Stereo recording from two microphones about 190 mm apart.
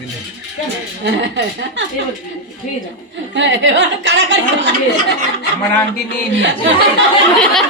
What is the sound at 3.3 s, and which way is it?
Speech, 70° right (ahead or behind).